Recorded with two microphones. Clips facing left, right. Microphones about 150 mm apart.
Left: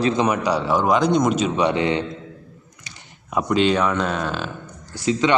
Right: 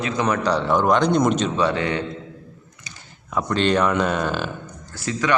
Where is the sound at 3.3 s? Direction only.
5° left (ahead or behind).